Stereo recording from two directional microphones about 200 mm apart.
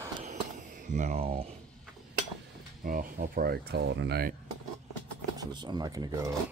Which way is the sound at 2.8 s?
45° right (ahead or behind).